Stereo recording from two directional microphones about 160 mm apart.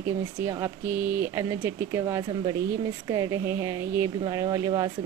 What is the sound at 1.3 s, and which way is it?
A woman's voice, 20° right (ahead or behind).